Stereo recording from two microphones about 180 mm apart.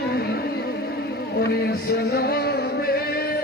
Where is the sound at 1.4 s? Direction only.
60° left (ahead or behind).